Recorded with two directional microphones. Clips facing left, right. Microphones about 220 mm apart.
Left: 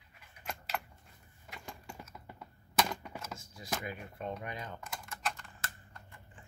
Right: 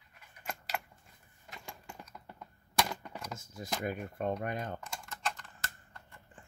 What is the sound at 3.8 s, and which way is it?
Speech, 50° right (ahead or behind).